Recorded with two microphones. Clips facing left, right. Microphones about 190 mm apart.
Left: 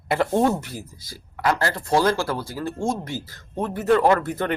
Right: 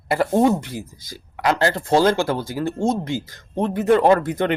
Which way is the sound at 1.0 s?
20° right (ahead or behind).